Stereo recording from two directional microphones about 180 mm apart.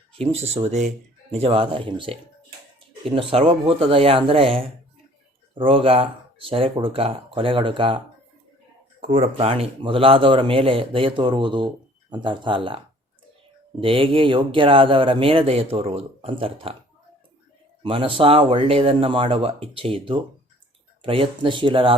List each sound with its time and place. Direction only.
0.2 s speech: 35° right (ahead or behind)
9.1 s speech: 35° right (ahead or behind)
17.8 s speech: 30° right (ahead or behind)